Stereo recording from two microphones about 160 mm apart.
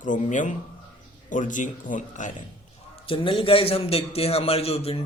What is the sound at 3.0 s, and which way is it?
A man's voice, 35° left (ahead or behind).